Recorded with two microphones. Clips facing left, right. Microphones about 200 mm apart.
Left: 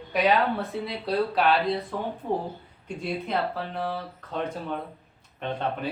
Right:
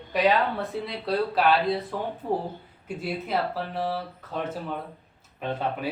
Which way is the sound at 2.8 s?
5° right (ahead or behind).